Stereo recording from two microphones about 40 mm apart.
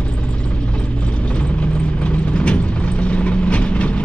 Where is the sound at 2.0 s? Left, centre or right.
Left.